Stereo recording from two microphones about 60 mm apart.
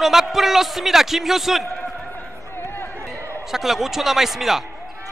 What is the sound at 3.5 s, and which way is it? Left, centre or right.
A man's voice, centre.